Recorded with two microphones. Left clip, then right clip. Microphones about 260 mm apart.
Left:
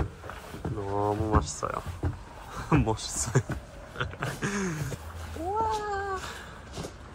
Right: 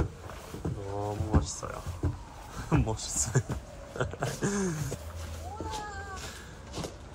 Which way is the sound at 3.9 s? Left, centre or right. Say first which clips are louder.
Even; centre.